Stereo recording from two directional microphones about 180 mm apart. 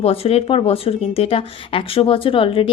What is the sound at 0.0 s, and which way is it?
A woman's voice, 35° left (ahead or behind).